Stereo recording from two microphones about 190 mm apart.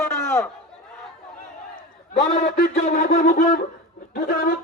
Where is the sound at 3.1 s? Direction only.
35° left (ahead or behind).